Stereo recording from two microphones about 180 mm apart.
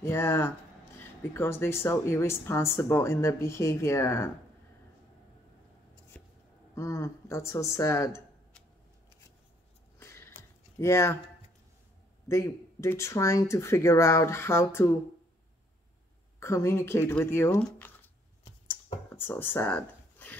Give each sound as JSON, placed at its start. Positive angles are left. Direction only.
{"t": 0.0, "sound": "speech", "side_deg": 15}
{"t": 6.7, "sound": "speech", "side_deg": 15}
{"t": 9.9, "sound": "a sound", "side_deg": 15}
{"t": 10.8, "sound": "speech", "side_deg": 15}
{"t": 12.3, "sound": "speech", "side_deg": 15}
{"t": 16.3, "sound": "speech", "side_deg": 15}
{"t": 19.0, "sound": "a sound", "side_deg": 10}